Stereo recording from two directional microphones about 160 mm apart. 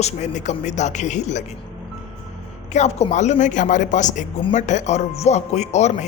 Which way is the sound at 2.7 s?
45° left (ahead or behind).